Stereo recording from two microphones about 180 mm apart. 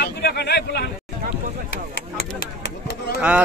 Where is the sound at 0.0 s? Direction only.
65° left (ahead or behind).